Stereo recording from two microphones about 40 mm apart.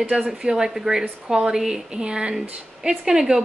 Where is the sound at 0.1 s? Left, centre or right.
Centre.